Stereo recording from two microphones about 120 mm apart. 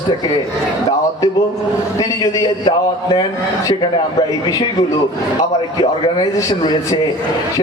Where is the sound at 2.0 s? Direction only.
35° left (ahead or behind).